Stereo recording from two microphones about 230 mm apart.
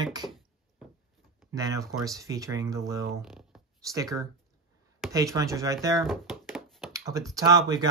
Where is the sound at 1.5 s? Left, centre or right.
Centre.